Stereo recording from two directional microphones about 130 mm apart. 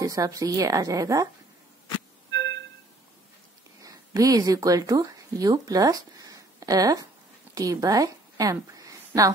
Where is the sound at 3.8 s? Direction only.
25° right (ahead or behind).